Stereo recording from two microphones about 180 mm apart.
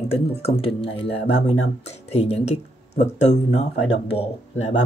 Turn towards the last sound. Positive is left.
turn(degrees=40)  # may be behind; listen again after turning